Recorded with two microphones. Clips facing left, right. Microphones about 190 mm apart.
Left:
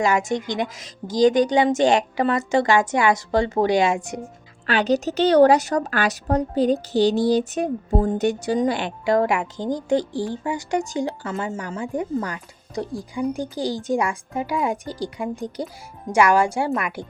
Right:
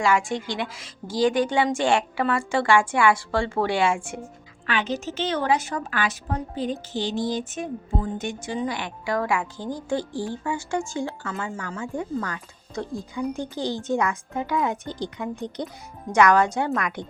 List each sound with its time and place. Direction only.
0.0 s a woman's voice: 20° left (ahead or behind)
4.6 s speech: 35° left (ahead or behind); by 17.1 s 5° left (ahead or behind)